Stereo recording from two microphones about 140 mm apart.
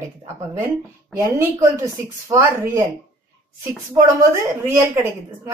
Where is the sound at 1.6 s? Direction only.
20° right (ahead or behind).